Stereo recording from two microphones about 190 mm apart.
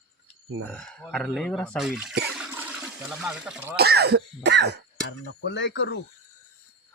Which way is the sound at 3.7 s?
55° right (ahead or behind).